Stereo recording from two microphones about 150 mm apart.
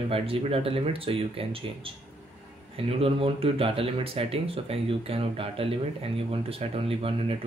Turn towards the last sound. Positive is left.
turn(degrees=-40)  # may be behind; listen again after turning